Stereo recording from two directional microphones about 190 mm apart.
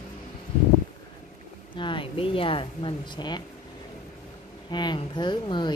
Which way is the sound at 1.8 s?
25° left (ahead or behind).